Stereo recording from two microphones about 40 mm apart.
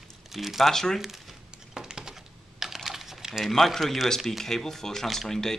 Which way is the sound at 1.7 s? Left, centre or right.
Centre.